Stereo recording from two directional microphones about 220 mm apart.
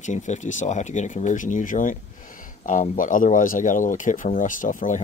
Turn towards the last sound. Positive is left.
turn(degrees=35)  # may be behind; listen again after turning